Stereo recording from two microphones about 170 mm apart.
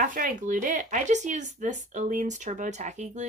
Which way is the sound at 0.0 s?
55° right (ahead or behind).